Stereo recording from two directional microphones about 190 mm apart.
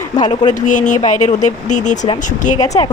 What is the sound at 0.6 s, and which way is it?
Speech, 40° left (ahead or behind).